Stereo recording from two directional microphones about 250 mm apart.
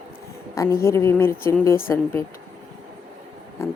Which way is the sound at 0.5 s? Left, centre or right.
Centre.